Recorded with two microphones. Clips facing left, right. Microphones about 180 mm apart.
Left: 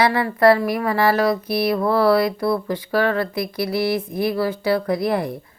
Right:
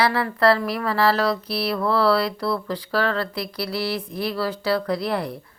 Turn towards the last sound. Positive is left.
turn(degrees=15)  # may be behind; listen again after turning